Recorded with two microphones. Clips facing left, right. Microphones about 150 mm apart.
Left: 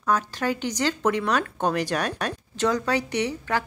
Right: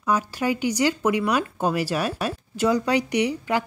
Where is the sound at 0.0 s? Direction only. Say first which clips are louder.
Right 1 dB; 10° right (ahead or behind).